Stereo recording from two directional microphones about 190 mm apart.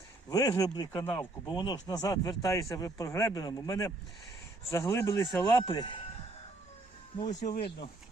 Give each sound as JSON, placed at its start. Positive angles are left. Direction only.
{"t": 0.3, "sound": "speech", "side_deg": 20}
{"t": 1.0, "sound": "speech", "side_deg": 10}
{"t": 1.5, "sound": "speech", "side_deg": 25}
{"t": 7.4, "sound": "speech", "side_deg": 50}